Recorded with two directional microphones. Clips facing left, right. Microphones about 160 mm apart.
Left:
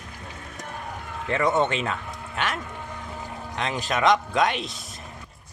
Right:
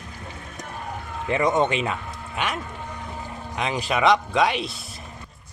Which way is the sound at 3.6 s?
5° right (ahead or behind).